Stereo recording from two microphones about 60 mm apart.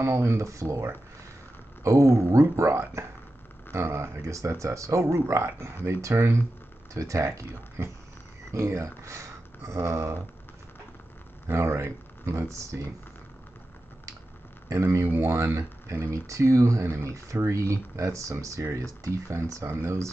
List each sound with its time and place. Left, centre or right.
0.0 s speech: right
3.7 s speech: right
5.2 s speech: right
5.9 s speech: right
11.4 s speech: right
14.7 s speech: right